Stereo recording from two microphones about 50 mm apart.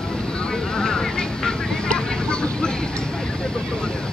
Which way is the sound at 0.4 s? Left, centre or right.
Centre.